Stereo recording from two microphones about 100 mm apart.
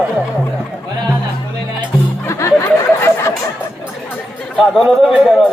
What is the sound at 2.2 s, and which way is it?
Music, 30° left (ahead or behind).